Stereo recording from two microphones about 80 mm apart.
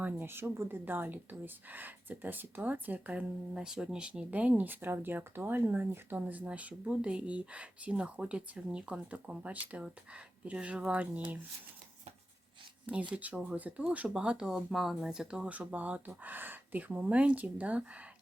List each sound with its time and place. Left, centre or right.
0.0 s speech: right
12.8 s speech: centre